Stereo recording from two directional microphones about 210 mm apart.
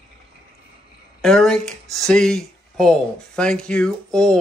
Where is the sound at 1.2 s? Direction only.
Centre (ahead or behind).